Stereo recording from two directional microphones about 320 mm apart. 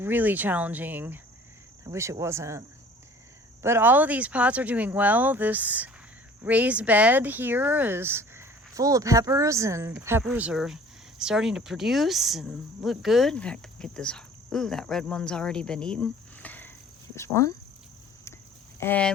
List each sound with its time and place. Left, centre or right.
0.0 s speech: centre
18.8 s speech: centre